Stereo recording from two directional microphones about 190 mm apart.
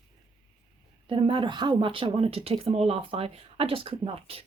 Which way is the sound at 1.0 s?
25° right (ahead or behind).